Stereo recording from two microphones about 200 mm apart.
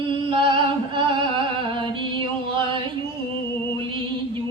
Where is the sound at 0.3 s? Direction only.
25° right (ahead or behind).